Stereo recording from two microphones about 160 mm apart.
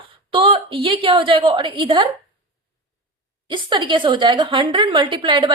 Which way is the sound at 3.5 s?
30° right (ahead or behind).